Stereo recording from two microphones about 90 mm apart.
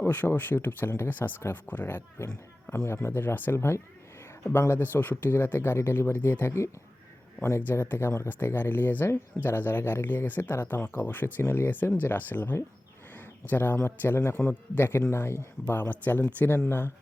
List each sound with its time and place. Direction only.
0.0 s speech: 20° left (ahead or behind)
7.7 s speech: 25° left (ahead or behind)